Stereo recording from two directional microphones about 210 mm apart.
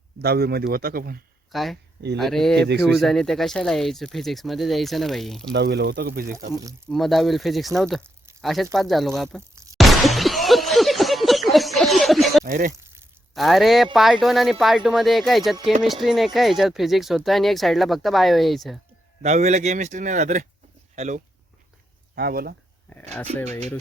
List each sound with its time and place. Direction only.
0.2 s a man's voice: 50° right (ahead or behind)
1.5 s speech: centre (ahead or behind)
2.6 s a man's voice: 50° right (ahead or behind)
3.0 s speech: centre (ahead or behind)
5.5 s a man's voice: 50° right (ahead or behind)
6.8 s speech: centre (ahead or behind)
9.7 s a sound: centre (ahead or behind)
12.5 s a man's voice: 40° right (ahead or behind)
12.7 s a sound: 15° right (ahead or behind)
13.3 s speech: centre (ahead or behind)
19.2 s a man's voice: 30° right (ahead or behind)
22.1 s speech: 45° right (ahead or behind)
23.5 s a man's voice: 30° right (ahead or behind)